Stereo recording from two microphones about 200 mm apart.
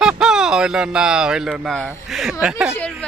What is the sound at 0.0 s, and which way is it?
A woman's voice, 5° right (ahead or behind).